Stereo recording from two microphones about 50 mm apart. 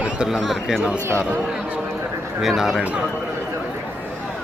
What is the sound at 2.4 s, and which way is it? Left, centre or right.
Speech, centre.